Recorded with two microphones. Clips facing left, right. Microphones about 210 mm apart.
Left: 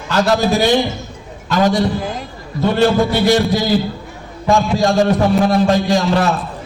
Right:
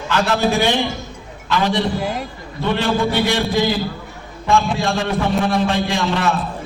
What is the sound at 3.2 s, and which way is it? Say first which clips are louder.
Speech: left 4 dB; 40° left (ahead or behind).